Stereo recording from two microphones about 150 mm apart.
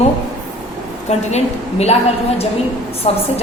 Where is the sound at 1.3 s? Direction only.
45° left (ahead or behind).